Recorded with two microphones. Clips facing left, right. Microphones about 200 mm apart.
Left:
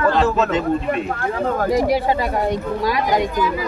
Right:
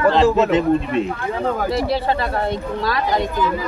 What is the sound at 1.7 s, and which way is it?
Speech, 15° left (ahead or behind).